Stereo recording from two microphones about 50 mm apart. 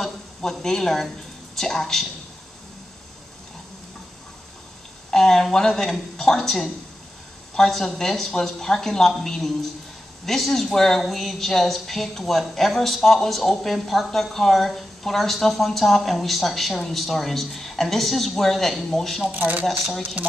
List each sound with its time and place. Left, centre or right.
0.0 s speech: centre
5.1 s speech: centre
19.3 s speech: right
19.6 s speech: centre